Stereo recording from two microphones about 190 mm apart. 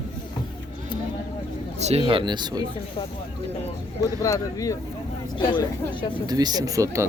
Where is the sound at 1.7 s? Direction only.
35° right (ahead or behind).